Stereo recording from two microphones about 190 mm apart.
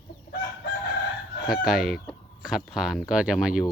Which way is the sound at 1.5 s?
Centre (ahead or behind).